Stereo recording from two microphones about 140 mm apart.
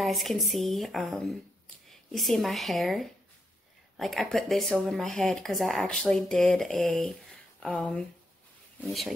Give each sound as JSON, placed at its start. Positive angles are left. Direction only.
{"t": 0.0, "sound": "speech", "side_deg": 0}